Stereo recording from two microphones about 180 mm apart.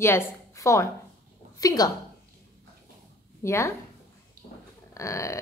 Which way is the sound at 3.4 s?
15° left (ahead or behind).